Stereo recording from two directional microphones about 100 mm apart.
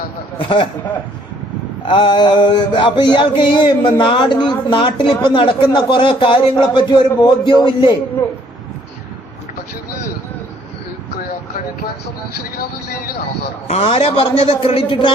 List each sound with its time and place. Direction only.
0.3 s speech: 55° left (ahead or behind)
1.8 s mantra: 60° left (ahead or behind)
8.2 s speech: 25° left (ahead or behind)
13.7 s a man's voice: 80° left